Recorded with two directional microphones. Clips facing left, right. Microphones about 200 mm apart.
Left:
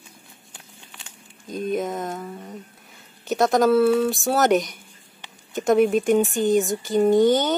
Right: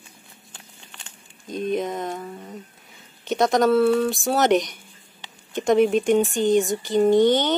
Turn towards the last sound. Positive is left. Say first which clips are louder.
# even
turn(degrees=0)  # may be behind; listen again after turning